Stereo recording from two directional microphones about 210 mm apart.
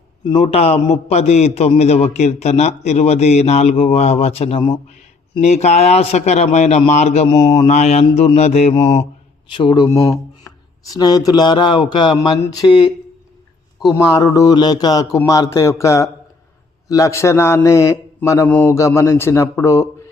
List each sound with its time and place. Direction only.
0.3 s a man's voice: 30° left (ahead or behind)
7.7 s a man's voice: 35° left (ahead or behind)
14.2 s a man's voice: 15° left (ahead or behind)